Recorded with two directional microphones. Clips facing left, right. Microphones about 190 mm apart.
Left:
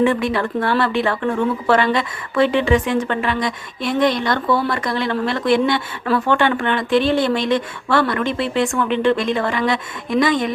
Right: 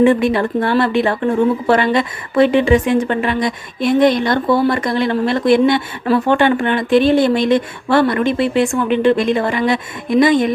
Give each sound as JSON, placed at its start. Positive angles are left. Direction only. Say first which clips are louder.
{"t": 0.0, "sound": "speech", "louder": "right 5 dB", "side_deg": -15}
{"t": 1.1, "sound": "speech", "louder": "right 4 dB", "side_deg": -30}
{"t": 1.6, "sound": "speech", "louder": "right 3 dB", "side_deg": -15}